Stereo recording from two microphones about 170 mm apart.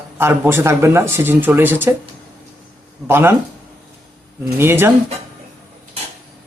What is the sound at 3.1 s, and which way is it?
Speech, 15° right (ahead or behind).